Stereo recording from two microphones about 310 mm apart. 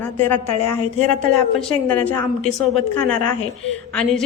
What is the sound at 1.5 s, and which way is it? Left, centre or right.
A woman's voice, centre.